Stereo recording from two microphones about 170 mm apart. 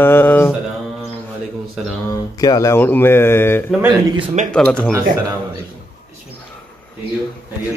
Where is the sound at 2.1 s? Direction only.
20° left (ahead or behind).